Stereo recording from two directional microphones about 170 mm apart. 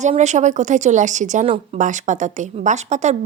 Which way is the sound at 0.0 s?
45° right (ahead or behind).